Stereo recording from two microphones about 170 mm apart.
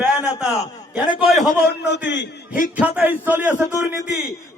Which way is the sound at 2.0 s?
90° left.